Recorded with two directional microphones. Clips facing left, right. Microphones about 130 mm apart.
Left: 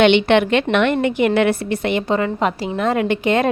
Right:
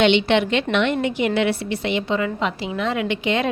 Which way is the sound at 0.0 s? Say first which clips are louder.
Left 4 dB; 55° left (ahead or behind).